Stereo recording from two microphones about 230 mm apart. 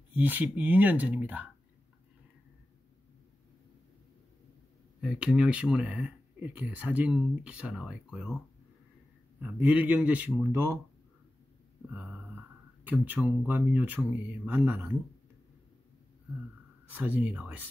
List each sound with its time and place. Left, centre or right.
0.1 s speech: centre
5.0 s speech: centre
9.4 s speech: centre
11.9 s speech: centre
16.9 s speech: centre